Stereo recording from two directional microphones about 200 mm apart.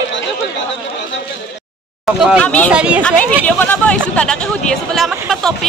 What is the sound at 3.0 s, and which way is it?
Speech, 5° left (ahead or behind).